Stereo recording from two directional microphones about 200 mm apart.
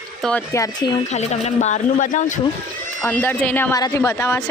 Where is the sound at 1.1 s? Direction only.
35° left (ahead or behind).